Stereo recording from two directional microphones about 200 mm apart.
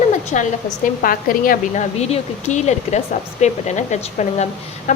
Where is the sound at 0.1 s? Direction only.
40° left (ahead or behind).